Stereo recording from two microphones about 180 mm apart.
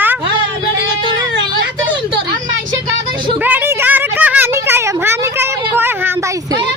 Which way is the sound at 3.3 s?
10° right (ahead or behind).